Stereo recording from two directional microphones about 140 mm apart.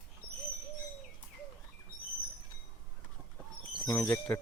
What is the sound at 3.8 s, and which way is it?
Speech, 15° left (ahead or behind).